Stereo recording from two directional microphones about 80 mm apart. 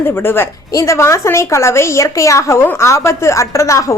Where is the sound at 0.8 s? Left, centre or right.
Left.